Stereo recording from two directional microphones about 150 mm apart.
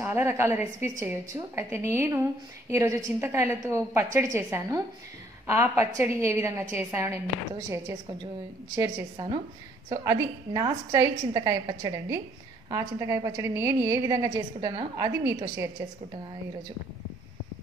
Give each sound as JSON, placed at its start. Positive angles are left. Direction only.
{"t": 0.0, "sound": "a woman's voice", "side_deg": -15}
{"t": 9.1, "sound": "a woman's voice", "side_deg": -35}
{"t": 9.8, "sound": "a woman's voice", "side_deg": -25}